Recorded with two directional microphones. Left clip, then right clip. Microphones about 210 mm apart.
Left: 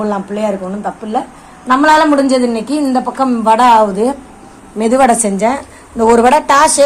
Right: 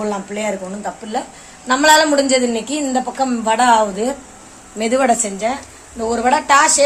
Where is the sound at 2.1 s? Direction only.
Centre (ahead or behind).